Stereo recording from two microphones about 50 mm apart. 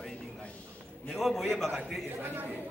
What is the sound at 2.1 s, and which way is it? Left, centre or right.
Speech, right.